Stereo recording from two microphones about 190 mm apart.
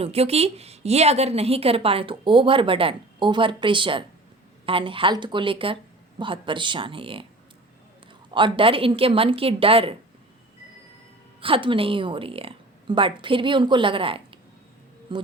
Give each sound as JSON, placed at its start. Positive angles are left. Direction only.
{"t": 0.0, "sound": "a woman's voice", "side_deg": -30}
{"t": 8.3, "sound": "a woman's voice", "side_deg": -25}
{"t": 11.3, "sound": "a woman's voice", "side_deg": -30}